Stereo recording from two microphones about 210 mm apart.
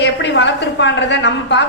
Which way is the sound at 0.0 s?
55° left (ahead or behind).